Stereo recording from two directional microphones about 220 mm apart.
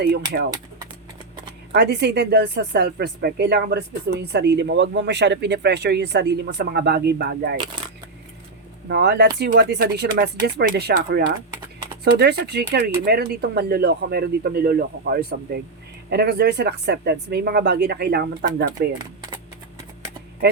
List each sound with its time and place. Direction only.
0.0 s speech: 45° right (ahead or behind)
1.7 s speech: 50° right (ahead or behind)
8.9 s speech: 50° right (ahead or behind)